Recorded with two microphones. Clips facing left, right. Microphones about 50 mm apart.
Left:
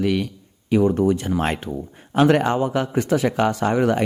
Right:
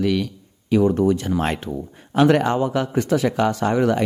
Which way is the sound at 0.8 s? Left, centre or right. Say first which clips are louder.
Right 1 dB; centre.